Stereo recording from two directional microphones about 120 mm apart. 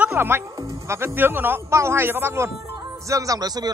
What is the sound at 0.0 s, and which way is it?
Speech, 20° right (ahead or behind).